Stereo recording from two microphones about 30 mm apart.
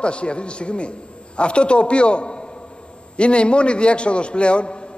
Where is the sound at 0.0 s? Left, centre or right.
Left.